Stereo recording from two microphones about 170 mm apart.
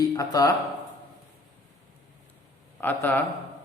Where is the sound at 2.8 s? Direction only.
10° left (ahead or behind).